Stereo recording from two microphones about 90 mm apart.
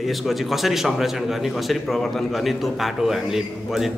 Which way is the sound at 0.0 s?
Centre (ahead or behind).